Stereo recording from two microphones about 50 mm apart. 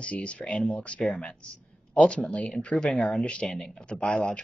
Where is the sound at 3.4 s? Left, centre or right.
Centre.